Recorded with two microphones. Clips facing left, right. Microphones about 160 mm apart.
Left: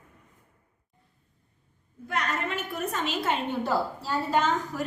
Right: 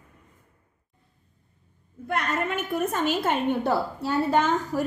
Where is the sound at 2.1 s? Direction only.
55° right (ahead or behind).